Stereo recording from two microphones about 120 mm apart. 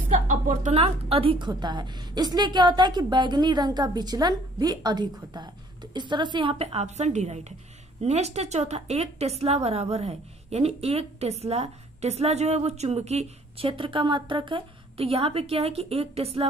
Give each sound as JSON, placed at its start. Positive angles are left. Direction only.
{"t": 0.3, "sound": "a woman's voice", "side_deg": -90}
{"t": 0.7, "sound": "a woman's voice", "side_deg": -55}
{"t": 1.5, "sound": "a woman's voice", "side_deg": -35}
{"t": 6.6, "sound": "a woman's voice", "side_deg": -60}
{"t": 13.7, "sound": "a woman's voice", "side_deg": -45}